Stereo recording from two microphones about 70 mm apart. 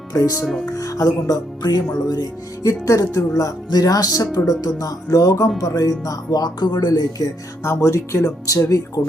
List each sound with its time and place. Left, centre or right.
0.1 s speech: left
0.6 s music: left
2.6 s speech: left
3.7 s music: left
7.6 s speech: left